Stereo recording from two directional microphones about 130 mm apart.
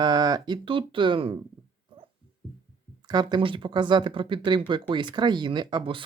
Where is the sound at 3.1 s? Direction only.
35° right (ahead or behind).